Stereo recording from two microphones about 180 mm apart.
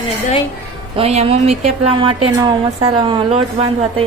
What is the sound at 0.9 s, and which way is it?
A woman's voice, 35° right (ahead or behind).